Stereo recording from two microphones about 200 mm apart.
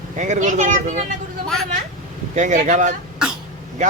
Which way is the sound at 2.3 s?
35° right (ahead or behind).